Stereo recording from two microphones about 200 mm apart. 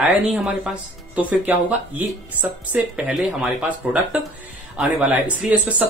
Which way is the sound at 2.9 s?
5° right (ahead or behind).